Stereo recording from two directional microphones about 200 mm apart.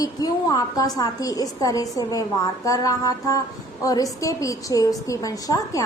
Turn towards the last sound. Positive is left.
turn(degrees=15)  # may be behind; listen again after turning